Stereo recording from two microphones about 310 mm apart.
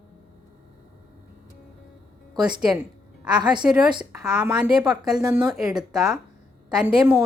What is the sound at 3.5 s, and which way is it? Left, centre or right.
A woman's voice, centre.